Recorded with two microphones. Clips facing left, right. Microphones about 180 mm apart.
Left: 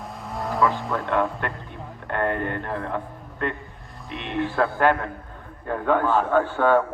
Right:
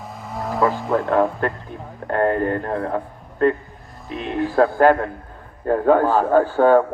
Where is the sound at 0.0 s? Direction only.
Centre (ahead or behind).